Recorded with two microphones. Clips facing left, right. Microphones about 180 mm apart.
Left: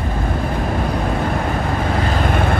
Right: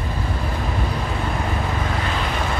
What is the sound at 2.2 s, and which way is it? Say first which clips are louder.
Vehicle: left 6 dB; 55° left (ahead or behind).